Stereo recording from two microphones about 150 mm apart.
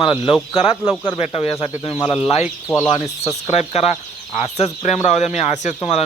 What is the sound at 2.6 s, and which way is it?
Speech, 15° left (ahead or behind).